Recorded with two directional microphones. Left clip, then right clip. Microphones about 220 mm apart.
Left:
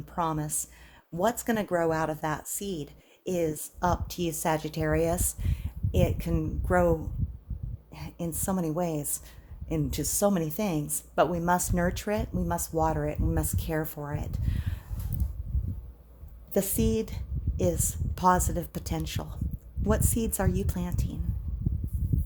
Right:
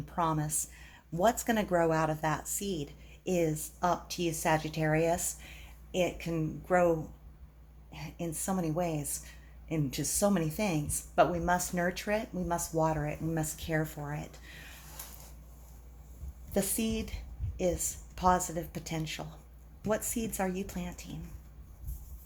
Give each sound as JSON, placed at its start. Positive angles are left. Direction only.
{"t": 0.0, "sound": "a woman's voice", "side_deg": 45}
{"t": 7.9, "sound": "speech", "side_deg": 45}
{"t": 16.5, "sound": "speech", "side_deg": 45}